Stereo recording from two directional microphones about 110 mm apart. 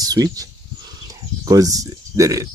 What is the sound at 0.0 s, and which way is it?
Speech, 35° right (ahead or behind).